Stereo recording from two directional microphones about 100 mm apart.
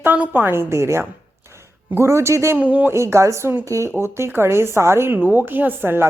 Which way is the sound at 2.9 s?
30° right (ahead or behind).